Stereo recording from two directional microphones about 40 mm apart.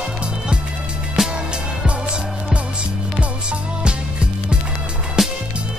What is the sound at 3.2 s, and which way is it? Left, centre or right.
Music, right.